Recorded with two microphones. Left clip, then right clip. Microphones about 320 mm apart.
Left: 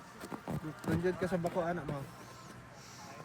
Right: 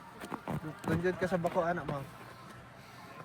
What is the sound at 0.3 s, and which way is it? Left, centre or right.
Bee, centre.